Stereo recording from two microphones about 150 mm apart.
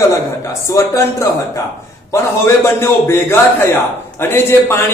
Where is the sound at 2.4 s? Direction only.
15° left (ahead or behind).